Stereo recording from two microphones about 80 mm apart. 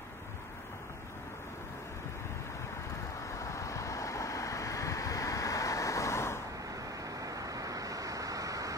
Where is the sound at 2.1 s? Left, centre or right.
Left.